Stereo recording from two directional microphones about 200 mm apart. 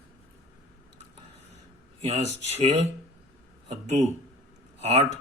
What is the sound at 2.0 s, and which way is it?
Speech, 35° right (ahead or behind).